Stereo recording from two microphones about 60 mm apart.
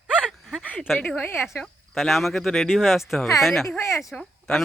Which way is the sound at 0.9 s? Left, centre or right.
Left.